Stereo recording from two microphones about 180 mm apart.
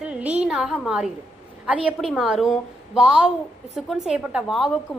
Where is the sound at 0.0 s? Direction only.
5° right (ahead or behind).